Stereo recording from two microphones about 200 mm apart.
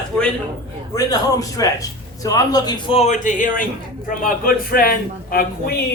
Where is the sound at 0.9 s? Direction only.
15° left (ahead or behind).